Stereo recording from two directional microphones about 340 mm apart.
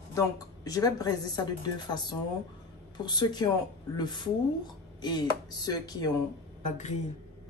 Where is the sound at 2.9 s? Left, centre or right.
Centre.